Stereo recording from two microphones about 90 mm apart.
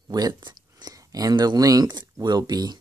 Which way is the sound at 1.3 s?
50° right (ahead or behind).